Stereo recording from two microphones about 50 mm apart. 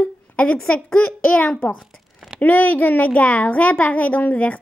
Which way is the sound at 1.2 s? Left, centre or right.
Left.